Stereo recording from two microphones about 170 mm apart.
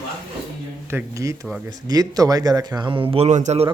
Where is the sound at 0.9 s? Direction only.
15° right (ahead or behind); by 3.7 s 40° right (ahead or behind).